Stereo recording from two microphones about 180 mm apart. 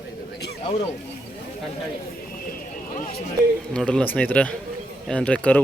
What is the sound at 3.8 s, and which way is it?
Speech, 5° left (ahead or behind).